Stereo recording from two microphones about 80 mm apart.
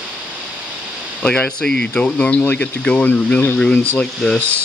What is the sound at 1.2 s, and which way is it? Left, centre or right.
Speech, centre.